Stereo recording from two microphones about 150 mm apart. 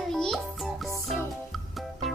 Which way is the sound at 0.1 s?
Centre (ahead or behind).